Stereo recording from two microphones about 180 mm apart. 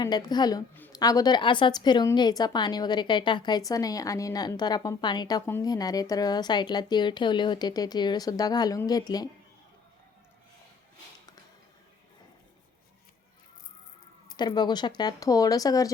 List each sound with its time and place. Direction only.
0.0 s a woman's voice: 20° left (ahead or behind)
14.3 s a woman's voice: 25° left (ahead or behind)